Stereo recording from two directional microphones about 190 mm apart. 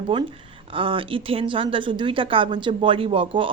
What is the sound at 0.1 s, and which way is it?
A woman's voice, 25° right (ahead or behind).